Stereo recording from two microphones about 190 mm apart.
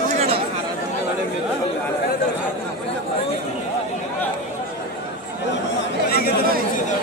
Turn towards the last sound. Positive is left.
turn(degrees=55)  # may be behind; listen again after turning